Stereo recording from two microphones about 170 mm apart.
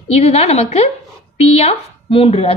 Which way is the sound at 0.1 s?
35° left (ahead or behind).